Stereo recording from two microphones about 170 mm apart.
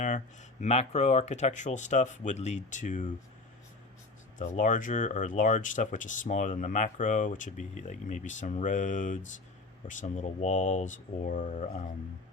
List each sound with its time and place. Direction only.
0.6 s speech: 40° left (ahead or behind)
4.4 s speech: 50° left (ahead or behind)